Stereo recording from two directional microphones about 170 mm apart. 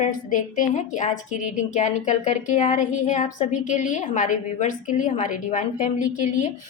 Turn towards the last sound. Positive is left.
turn(degrees=45)  # may be behind; listen again after turning